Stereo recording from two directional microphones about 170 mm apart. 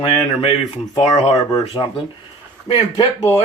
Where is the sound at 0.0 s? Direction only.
30° left (ahead or behind).